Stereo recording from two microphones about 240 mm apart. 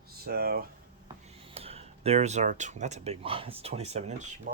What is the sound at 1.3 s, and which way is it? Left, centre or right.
Speech, right.